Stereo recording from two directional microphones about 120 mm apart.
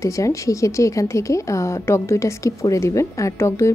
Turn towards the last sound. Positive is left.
turn(degrees=25)  # may be behind; listen again after turning